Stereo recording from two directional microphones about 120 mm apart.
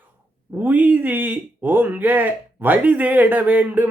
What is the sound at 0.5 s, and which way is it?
Speech, 15° right (ahead or behind).